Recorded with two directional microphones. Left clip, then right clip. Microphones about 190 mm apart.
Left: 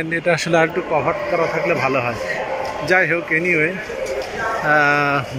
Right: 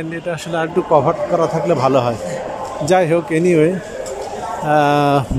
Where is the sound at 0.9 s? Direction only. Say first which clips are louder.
Right 8 dB; 30° right (ahead or behind).